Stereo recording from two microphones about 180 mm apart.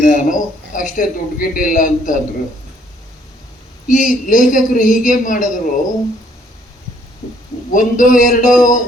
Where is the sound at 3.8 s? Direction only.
45° left (ahead or behind).